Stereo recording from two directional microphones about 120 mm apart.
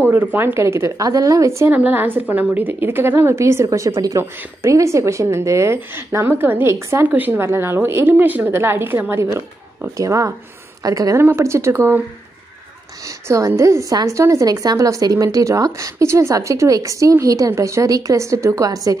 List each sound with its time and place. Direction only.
0.0 s a woman's voice: 15° right (ahead or behind)
13.3 s a woman's voice: 25° right (ahead or behind)